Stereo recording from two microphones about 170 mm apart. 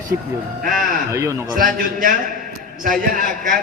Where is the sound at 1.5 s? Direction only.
55° right (ahead or behind).